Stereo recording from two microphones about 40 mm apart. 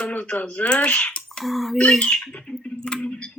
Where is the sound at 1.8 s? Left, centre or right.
Left.